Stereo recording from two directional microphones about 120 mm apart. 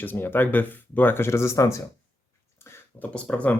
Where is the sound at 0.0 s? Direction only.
15° left (ahead or behind).